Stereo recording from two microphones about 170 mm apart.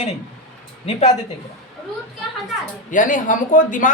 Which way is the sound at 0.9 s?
40° left (ahead or behind).